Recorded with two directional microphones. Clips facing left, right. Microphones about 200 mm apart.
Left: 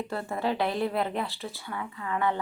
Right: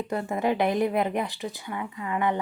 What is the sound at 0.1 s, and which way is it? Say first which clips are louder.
A woman's voice: right 5 dB; 15° right (ahead or behind).